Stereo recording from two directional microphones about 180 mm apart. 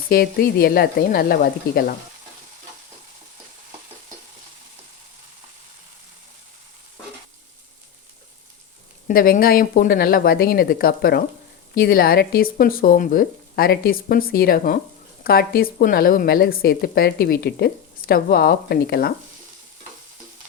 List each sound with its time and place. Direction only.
0.1 s a woman's voice: 55° left (ahead or behind)
9.0 s a woman's voice: 50° left (ahead or behind)